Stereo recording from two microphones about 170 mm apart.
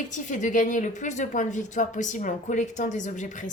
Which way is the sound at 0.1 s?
45° left (ahead or behind).